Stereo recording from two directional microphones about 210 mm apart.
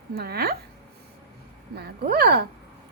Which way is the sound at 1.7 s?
50° right (ahead or behind).